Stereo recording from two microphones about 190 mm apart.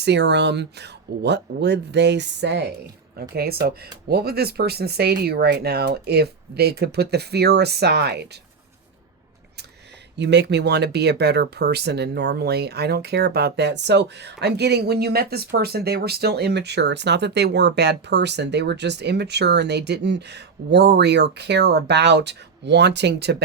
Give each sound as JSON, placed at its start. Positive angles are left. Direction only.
{"t": 0.0, "sound": "speech", "side_deg": -65}
{"t": 10.2, "sound": "speech", "side_deg": -65}